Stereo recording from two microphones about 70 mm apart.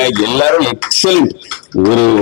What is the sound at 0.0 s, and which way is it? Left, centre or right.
Speech, left.